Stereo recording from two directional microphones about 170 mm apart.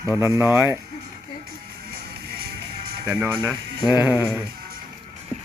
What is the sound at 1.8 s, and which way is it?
Music, 70° right (ahead or behind).